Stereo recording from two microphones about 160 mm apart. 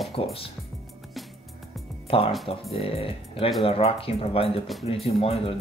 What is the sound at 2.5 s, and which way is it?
Speech, 35° left (ahead or behind).